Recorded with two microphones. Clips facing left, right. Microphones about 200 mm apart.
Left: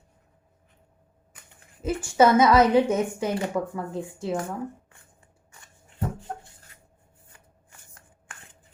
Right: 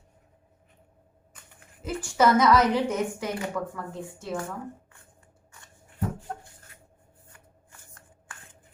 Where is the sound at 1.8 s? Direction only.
25° left (ahead or behind).